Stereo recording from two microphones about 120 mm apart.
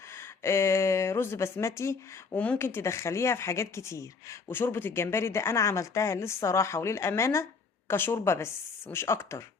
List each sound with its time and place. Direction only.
0.1 s speech: 20° left (ahead or behind)